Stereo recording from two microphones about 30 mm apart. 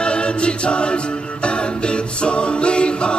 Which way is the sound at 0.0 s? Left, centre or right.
Left.